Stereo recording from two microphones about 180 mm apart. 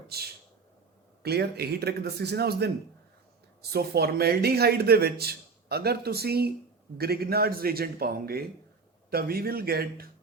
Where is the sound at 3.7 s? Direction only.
60° right (ahead or behind).